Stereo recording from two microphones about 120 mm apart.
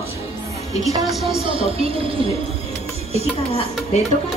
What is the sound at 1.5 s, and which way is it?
Speech, 55° right (ahead or behind).